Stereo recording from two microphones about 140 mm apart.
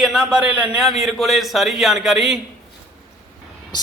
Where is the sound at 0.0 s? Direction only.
5° right (ahead or behind).